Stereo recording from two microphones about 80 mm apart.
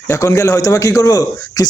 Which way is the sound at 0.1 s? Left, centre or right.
Left.